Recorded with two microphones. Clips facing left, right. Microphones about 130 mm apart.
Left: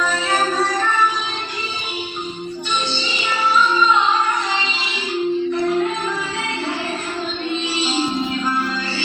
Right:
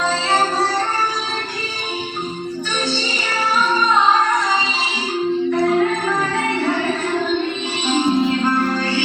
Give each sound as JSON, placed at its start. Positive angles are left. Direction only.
{"t": 0.0, "sound": "music", "side_deg": -30}
{"t": 3.2, "sound": "music", "side_deg": -35}
{"t": 7.8, "sound": "music", "side_deg": -55}
{"t": 8.4, "sound": "music", "side_deg": -45}